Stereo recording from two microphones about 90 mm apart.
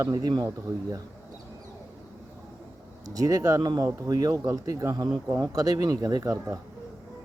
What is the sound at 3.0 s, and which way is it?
Speech, 45° right (ahead or behind).